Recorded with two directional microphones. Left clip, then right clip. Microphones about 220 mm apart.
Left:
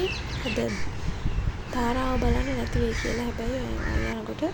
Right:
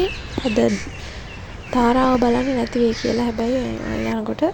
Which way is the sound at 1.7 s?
35° right (ahead or behind).